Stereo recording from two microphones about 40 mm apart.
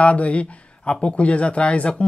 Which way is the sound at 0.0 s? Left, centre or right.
Left.